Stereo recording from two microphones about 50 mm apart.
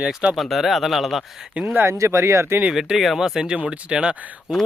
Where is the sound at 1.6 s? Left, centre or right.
Right.